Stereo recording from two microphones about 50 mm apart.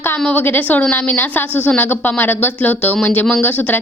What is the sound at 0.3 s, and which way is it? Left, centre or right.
Speech, left.